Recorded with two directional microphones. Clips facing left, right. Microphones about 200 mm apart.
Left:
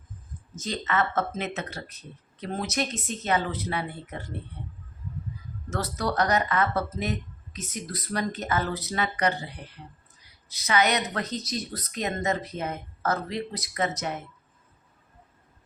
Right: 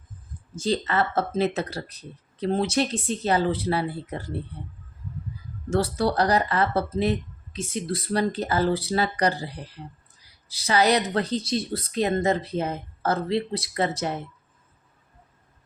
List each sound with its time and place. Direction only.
0.5 s speech: 30° right (ahead or behind)
5.7 s speech: 30° right (ahead or behind)